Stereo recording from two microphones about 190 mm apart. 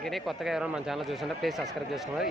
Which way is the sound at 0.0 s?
Centre (ahead or behind).